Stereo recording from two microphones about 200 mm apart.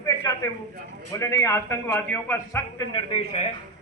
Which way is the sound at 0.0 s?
15° left (ahead or behind).